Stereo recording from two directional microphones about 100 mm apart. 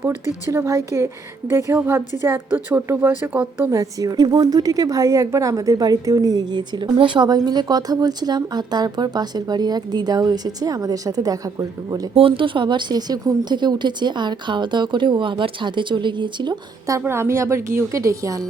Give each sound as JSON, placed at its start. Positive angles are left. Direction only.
{"t": 0.4, "sound": "a woman's voice", "side_deg": -30}
{"t": 3.7, "sound": "a woman's voice", "side_deg": -35}
{"t": 12.1, "sound": "a woman's voice", "side_deg": -65}
{"t": 17.1, "sound": "a woman's voice", "side_deg": -25}